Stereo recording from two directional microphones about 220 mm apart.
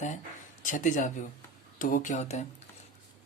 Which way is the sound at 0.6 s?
35° left (ahead or behind).